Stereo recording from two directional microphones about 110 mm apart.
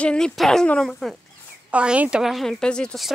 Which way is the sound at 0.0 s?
10° left (ahead or behind).